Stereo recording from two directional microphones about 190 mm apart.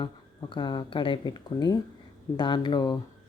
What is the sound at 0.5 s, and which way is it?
Speech, 25° left (ahead or behind).